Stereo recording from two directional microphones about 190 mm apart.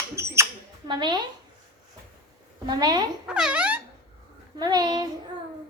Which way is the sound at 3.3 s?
5° right (ahead or behind).